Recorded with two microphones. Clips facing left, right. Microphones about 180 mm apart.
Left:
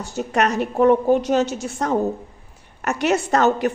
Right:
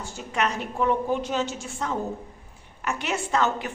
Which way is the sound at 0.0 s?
70° left (ahead or behind).